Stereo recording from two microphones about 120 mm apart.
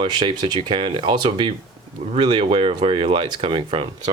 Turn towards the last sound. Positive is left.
turn(degrees=-45)  # may be behind; listen again after turning